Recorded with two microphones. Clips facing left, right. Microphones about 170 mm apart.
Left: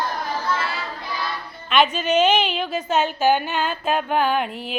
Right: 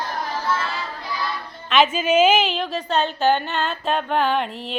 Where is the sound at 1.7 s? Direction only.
5° right (ahead or behind).